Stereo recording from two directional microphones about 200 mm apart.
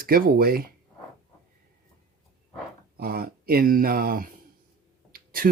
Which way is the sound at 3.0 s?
50° right (ahead or behind).